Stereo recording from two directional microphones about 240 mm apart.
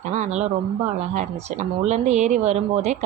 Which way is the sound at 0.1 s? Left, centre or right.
Right.